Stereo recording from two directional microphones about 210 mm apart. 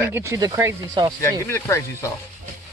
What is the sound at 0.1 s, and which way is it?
Speech, 15° right (ahead or behind).